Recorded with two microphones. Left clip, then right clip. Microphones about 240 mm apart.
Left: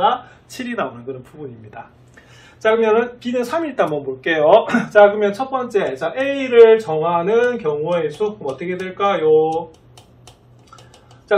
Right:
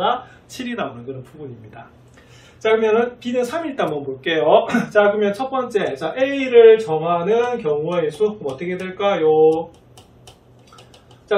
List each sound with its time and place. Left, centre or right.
0.0 s a woman's voice: centre
2.6 s a woman's voice: centre